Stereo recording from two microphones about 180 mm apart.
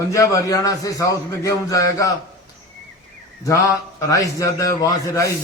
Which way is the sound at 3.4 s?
15° left (ahead or behind).